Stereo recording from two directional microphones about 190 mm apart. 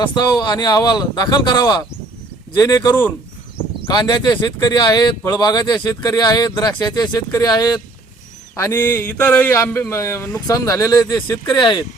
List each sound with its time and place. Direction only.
0.1 s speech: 20° left (ahead or behind)